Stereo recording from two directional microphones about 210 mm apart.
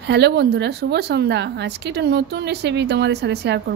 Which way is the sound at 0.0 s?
55° right (ahead or behind).